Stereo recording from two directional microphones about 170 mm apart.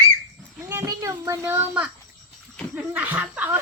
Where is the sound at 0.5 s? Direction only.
15° right (ahead or behind).